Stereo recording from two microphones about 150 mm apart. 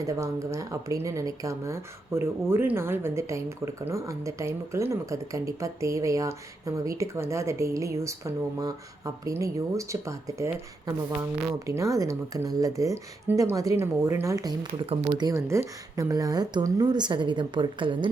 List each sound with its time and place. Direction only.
0.0 s speech: 20° right (ahead or behind)
14.8 s speech: 40° right (ahead or behind)
15.2 s speech: 20° right (ahead or behind)